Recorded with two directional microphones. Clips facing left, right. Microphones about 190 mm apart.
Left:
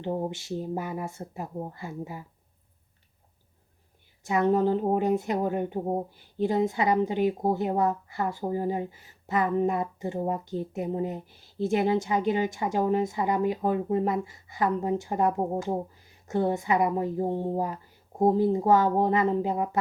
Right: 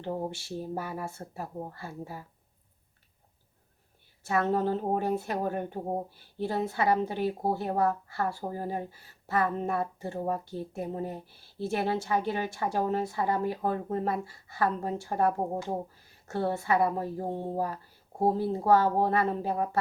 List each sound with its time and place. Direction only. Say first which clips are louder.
0.0 s speech: left 3 dB; 15° left (ahead or behind)
4.2 s speech: left 4 dB; 15° left (ahead or behind)